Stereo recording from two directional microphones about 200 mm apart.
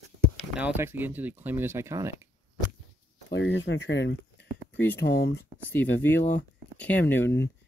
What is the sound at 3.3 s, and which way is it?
Speech, 60° left (ahead or behind).